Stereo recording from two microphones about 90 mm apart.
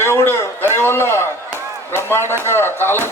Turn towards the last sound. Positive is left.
turn(degrees=25)  # may be behind; listen again after turning